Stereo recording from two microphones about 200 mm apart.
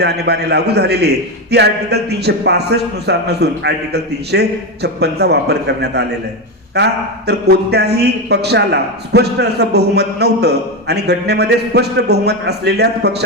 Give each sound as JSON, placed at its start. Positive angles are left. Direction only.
{"t": 0.0, "sound": "a man's voice", "side_deg": -55}